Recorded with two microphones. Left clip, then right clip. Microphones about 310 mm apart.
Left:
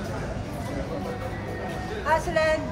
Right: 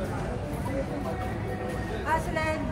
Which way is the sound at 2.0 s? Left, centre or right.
Left.